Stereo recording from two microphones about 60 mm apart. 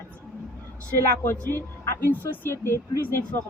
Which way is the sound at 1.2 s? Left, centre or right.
Left.